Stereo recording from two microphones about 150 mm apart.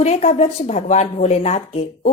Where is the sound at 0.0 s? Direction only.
45° left (ahead or behind).